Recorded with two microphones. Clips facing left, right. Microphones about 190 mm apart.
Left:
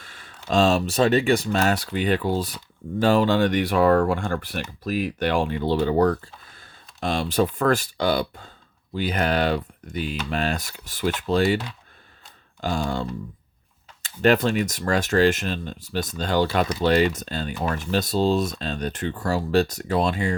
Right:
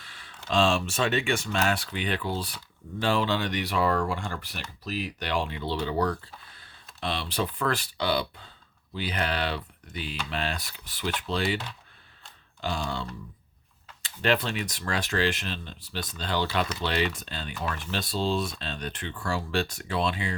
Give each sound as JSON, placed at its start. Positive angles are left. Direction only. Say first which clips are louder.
{"t": 0.0, "sound": "speech", "louder": "left 4 dB", "side_deg": 45}
{"t": 12.6, "sound": "speech", "louder": "left 6 dB", "side_deg": 45}